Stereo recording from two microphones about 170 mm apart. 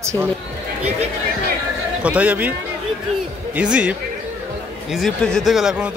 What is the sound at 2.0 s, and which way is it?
Speech, 10° right (ahead or behind).